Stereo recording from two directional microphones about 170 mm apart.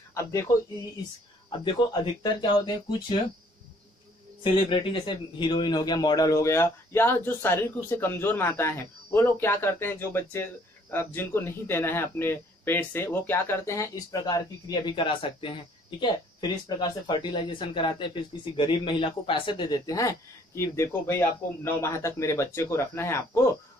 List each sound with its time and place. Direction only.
0.1 s speech: 15° left (ahead or behind)
2.2 s speech: 25° left (ahead or behind)
4.4 s a man's voice: 30° left (ahead or behind)